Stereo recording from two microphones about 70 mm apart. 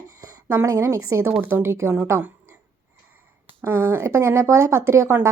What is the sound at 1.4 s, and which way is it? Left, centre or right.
Speech, right.